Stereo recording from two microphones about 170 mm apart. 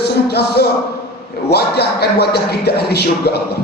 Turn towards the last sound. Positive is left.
turn(degrees=70)  # may be behind; listen again after turning